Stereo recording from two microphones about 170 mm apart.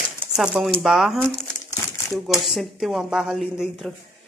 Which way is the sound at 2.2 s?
Centre (ahead or behind).